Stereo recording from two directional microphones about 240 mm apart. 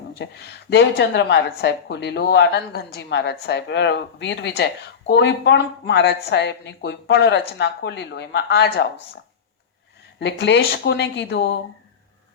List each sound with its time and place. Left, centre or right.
0.2 s a woman's voice: left
10.2 s a woman's voice: left